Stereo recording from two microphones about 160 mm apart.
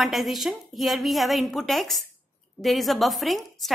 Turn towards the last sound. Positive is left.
turn(degrees=0)  # may be behind; listen again after turning